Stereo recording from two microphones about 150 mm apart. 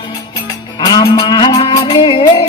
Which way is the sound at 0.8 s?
25° left (ahead or behind).